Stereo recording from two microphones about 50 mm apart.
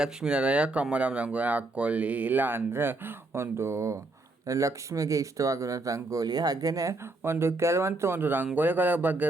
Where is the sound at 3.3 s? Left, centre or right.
Right.